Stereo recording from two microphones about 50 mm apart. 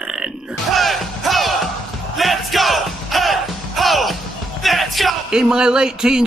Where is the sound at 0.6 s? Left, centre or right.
Centre.